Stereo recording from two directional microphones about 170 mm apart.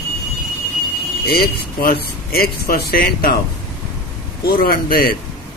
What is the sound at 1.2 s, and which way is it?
Speech, 65° left (ahead or behind).